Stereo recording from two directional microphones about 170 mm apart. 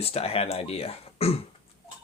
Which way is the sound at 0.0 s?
35° left (ahead or behind).